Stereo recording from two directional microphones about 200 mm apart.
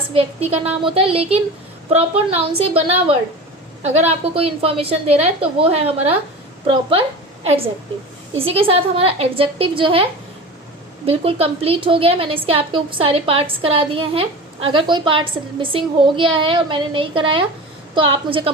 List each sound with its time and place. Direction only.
0.1 s a woman's voice: 30° right (ahead or behind)
8.4 s a woman's voice: 30° right (ahead or behind)